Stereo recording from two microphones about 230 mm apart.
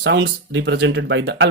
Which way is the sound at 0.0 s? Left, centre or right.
Right.